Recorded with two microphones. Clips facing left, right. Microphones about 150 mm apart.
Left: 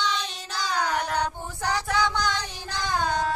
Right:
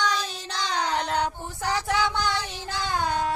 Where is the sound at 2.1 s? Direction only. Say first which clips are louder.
Right 1 dB; 15° left (ahead or behind).